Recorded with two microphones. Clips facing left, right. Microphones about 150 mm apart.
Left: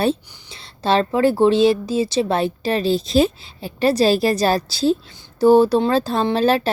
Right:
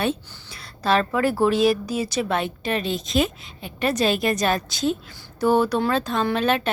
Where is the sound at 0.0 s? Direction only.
30° left (ahead or behind).